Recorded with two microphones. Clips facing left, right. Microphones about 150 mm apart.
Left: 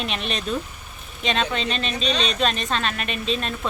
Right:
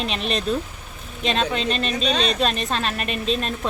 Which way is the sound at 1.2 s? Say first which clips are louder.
Right 1 dB; centre (ahead or behind).